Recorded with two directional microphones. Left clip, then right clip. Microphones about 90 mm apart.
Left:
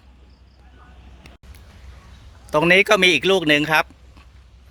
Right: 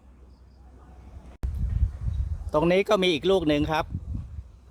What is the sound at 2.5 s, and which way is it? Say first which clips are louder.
Speech: left 7 dB; 25° left (ahead or behind).